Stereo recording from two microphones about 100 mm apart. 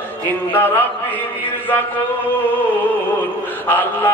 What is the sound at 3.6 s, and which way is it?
Speech, 20° left (ahead or behind).